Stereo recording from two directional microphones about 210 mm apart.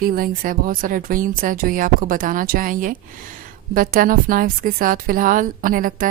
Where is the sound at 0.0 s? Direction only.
45° right (ahead or behind).